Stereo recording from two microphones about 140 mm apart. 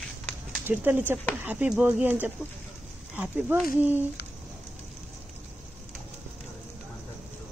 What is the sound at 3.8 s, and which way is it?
Speech, 10° right (ahead or behind).